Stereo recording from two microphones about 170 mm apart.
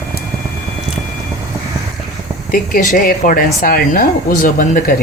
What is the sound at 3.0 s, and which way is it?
Speech, 55° left (ahead or behind).